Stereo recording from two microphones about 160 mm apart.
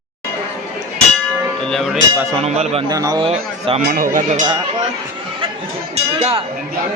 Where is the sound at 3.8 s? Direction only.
65° right (ahead or behind).